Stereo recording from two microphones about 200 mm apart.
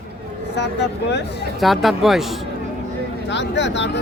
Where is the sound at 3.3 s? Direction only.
60° left (ahead or behind).